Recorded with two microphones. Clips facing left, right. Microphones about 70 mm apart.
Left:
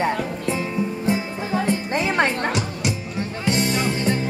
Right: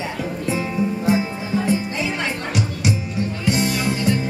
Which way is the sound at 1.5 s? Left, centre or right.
Left.